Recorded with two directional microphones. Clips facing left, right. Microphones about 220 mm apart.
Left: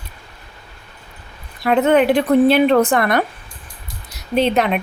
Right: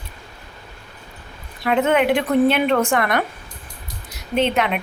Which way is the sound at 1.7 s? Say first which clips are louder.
Left 3 dB; 35° left (ahead or behind).